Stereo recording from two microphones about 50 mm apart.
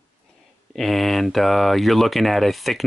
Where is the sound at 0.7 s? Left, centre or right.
Centre.